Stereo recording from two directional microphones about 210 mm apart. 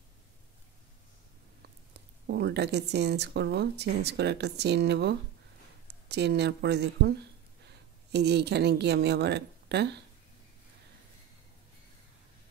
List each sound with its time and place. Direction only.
2.0 s a woman's voice: 55° right (ahead or behind)